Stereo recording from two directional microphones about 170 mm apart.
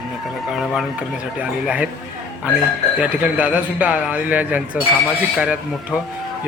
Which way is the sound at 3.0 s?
10° right (ahead or behind).